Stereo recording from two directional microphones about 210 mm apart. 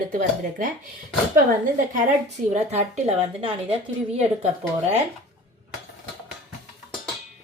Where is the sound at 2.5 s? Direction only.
35° right (ahead or behind).